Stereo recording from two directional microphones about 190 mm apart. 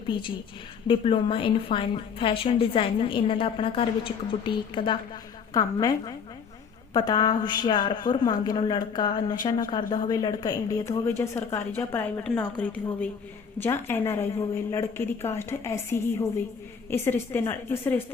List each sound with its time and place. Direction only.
0.1 s a woman's voice: 25° left (ahead or behind); by 18.0 s 10° left (ahead or behind)